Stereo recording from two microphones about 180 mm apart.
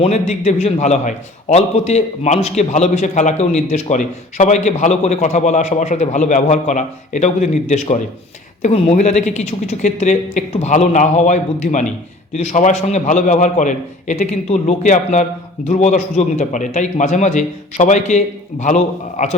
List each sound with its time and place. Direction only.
0.0 s a man's voice: 40° left (ahead or behind)